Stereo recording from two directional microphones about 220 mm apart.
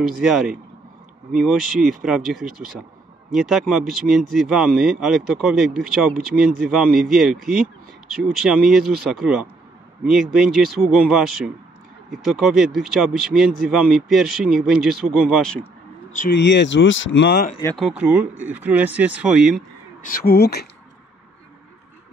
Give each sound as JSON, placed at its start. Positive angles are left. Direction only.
{"t": 0.2, "sound": "speech", "side_deg": 0}
{"t": 16.3, "sound": "speech", "side_deg": 55}
{"t": 17.7, "sound": "speech", "side_deg": -5}
{"t": 20.0, "sound": "speech", "side_deg": 40}